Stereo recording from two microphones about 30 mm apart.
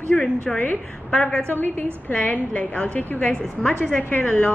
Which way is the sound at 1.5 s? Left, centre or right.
Left.